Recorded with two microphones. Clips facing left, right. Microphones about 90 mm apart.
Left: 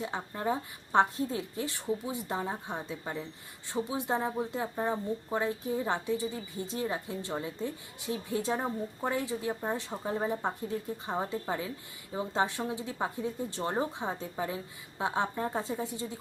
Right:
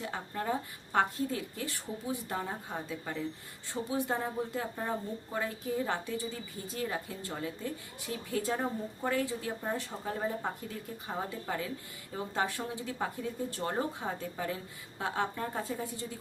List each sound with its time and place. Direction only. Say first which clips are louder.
0.0 s a woman's voice: left 3 dB; 20° left (ahead or behind)